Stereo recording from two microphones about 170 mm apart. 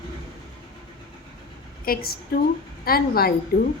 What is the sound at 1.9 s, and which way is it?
Speech, 60° left (ahead or behind).